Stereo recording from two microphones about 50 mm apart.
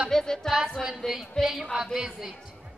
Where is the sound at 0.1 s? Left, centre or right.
Centre.